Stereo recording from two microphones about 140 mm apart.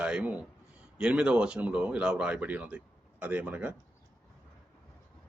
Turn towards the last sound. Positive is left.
turn(degrees=-10)  # may be behind; listen again after turning